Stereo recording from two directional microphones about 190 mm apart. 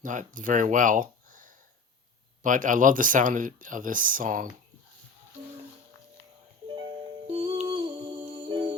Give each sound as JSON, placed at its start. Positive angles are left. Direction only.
{"t": 0.0, "sound": "speech", "side_deg": -45}
{"t": 7.3, "sound": "music", "side_deg": -30}
{"t": 7.7, "sound": "humming", "side_deg": -25}
{"t": 8.1, "sound": "music", "side_deg": -35}
{"t": 8.4, "sound": "music", "side_deg": -25}